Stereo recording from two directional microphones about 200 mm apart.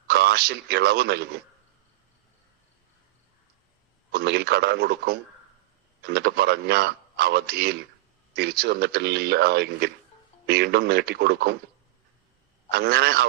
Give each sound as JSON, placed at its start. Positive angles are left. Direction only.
{"t": 0.1, "sound": "a man's voice", "side_deg": -50}
{"t": 4.1, "sound": "a man's voice", "side_deg": -55}
{"t": 12.7, "sound": "a man's voice", "side_deg": -55}